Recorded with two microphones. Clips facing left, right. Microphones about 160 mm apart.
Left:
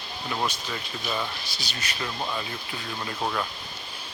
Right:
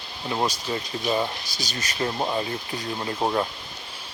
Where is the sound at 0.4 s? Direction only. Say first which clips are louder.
Right 4 dB; 35° right (ahead or behind).